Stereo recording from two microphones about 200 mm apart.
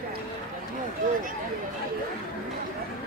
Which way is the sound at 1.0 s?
40° right (ahead or behind).